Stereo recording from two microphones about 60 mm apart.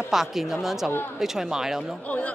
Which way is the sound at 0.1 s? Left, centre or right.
Centre.